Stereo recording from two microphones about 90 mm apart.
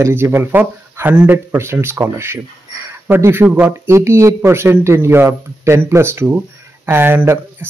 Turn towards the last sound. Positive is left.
turn(degrees=-25)  # may be behind; listen again after turning